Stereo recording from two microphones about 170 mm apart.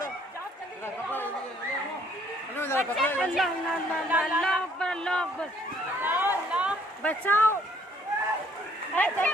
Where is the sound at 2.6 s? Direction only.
15° left (ahead or behind).